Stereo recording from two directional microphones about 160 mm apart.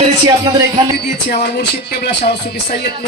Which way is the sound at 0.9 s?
90° left.